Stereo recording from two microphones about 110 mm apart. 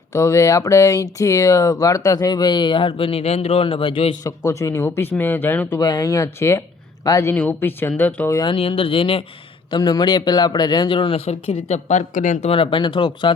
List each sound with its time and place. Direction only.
0.1 s speech: 30° left (ahead or behind); by 4.1 s 55° left (ahead or behind)
4.2 s speech: 30° left (ahead or behind)
5.8 s speech: 30° left (ahead or behind); by 8.3 s 15° left (ahead or behind)
8.4 s speech: 60° left (ahead or behind)
9.6 s a man's voice: 40° left (ahead or behind)
11.3 s speech: 80° left
12.5 s a man's voice: 50° left (ahead or behind)